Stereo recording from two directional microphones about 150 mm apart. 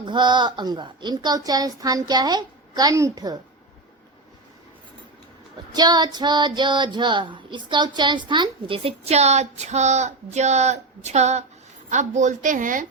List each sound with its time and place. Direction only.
0.0 s a woman's voice: 30° right (ahead or behind)
5.7 s female singing: 30° right (ahead or behind); by 11.4 s 50° right (ahead or behind)
11.9 s a woman's voice: 55° right (ahead or behind)